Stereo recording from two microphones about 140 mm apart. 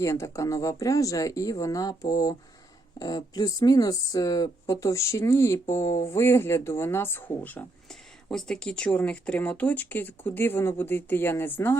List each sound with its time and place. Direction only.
0.0 s speech: 20° left (ahead or behind)
8.3 s speech: 5° left (ahead or behind)